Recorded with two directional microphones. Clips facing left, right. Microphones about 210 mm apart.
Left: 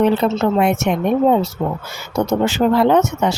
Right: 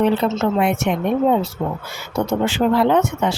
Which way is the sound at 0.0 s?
40° left (ahead or behind).